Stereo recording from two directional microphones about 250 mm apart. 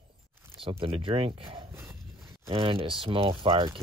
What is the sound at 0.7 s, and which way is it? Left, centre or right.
Speech, right.